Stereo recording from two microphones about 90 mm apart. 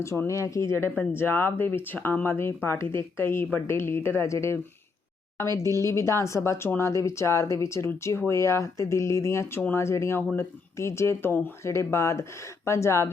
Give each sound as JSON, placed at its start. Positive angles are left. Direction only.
{"t": 0.3, "sound": "speech", "side_deg": 35}